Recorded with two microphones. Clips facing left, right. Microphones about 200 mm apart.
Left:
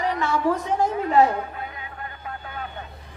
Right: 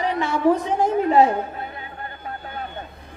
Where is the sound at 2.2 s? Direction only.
35° right (ahead or behind).